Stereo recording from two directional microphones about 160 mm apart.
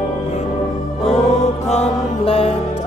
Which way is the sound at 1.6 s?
40° left (ahead or behind).